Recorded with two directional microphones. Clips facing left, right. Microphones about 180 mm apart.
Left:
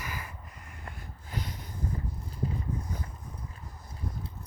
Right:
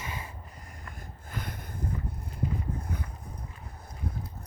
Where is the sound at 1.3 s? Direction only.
55° right (ahead or behind).